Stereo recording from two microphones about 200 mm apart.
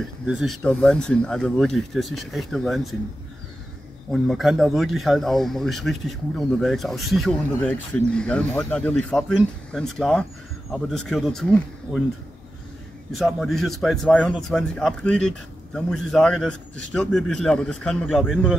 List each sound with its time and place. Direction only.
0.0 s speech: centre (ahead or behind)
4.1 s speech: centre (ahead or behind)
13.1 s speech: centre (ahead or behind)